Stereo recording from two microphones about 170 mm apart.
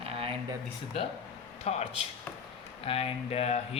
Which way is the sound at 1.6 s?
40° left (ahead or behind).